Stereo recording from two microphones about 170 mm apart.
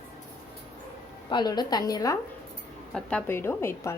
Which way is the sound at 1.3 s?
25° left (ahead or behind).